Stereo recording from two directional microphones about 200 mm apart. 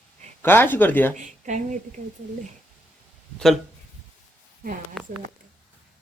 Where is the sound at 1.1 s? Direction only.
40° right (ahead or behind).